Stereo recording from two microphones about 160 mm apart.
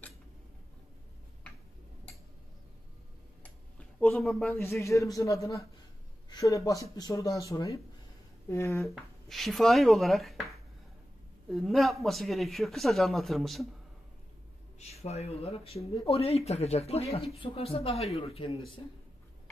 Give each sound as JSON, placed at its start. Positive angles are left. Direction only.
{"t": 4.0, "sound": "speech", "side_deg": 5}
{"t": 4.6, "sound": "a man's voice", "side_deg": 15}
{"t": 8.8, "sound": "speech", "side_deg": 0}
{"t": 14.8, "sound": "speech", "side_deg": 40}